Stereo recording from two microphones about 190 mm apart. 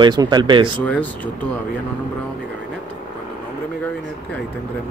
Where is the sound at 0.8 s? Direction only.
5° left (ahead or behind).